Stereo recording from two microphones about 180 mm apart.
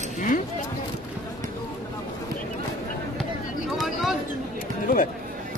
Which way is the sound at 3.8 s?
Centre (ahead or behind).